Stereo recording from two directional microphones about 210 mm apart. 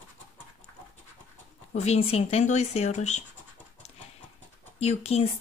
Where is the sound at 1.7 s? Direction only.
30° left (ahead or behind).